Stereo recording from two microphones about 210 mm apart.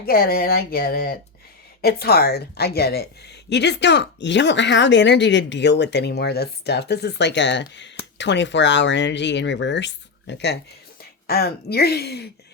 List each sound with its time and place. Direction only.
0.0 s a woman's voice: 45° left (ahead or behind)